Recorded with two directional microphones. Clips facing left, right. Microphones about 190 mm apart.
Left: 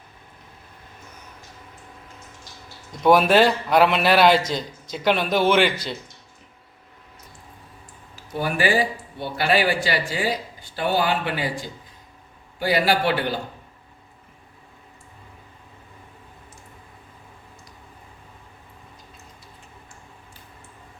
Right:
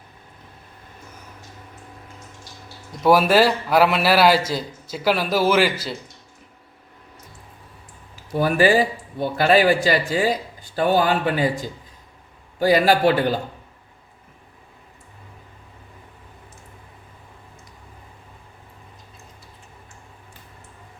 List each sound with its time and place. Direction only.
3.0 s a man's voice: 5° right (ahead or behind)
8.4 s speech: 40° right (ahead or behind)
12.5 s speech: 45° right (ahead or behind)